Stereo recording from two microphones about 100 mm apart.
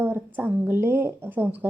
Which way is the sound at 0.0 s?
20° right (ahead or behind).